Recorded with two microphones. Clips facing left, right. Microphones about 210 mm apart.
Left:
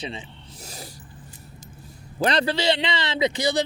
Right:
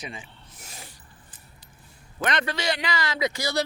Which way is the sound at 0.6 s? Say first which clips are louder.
Left 6 dB; 40° left (ahead or behind).